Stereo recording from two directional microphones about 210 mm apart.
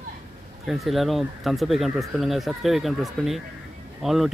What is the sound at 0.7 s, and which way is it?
Speech, centre (ahead or behind).